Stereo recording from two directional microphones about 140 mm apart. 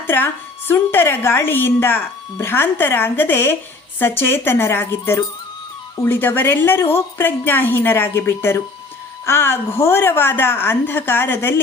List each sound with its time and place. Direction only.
0.7 s a woman's voice: 15° left (ahead or behind)